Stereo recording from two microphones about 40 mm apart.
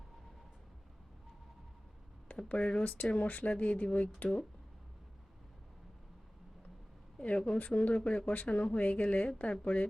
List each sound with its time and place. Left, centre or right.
2.5 s speech: left
7.3 s speech: left